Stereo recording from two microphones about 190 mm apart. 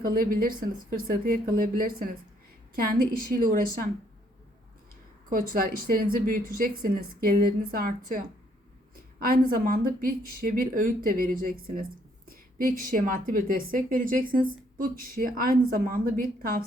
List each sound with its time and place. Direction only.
0.0 s a woman's voice: 50° right (ahead or behind)
5.3 s a woman's voice: 50° right (ahead or behind)
9.2 s a woman's voice: 50° right (ahead or behind)